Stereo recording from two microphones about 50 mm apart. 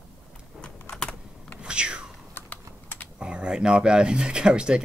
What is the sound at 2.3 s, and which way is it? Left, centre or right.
Typing, left.